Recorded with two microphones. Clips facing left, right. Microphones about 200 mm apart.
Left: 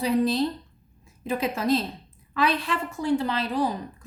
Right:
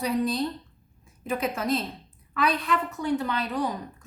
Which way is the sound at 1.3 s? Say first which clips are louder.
Left 3 dB; 30° left (ahead or behind).